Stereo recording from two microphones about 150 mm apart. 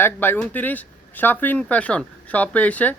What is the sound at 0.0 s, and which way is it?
Speech, 15° left (ahead or behind).